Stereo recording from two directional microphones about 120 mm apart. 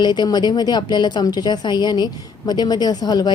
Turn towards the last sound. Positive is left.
turn(degrees=35)  # may be behind; listen again after turning